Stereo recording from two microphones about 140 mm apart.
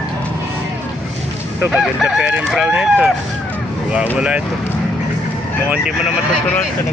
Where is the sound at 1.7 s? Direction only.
5° right (ahead or behind).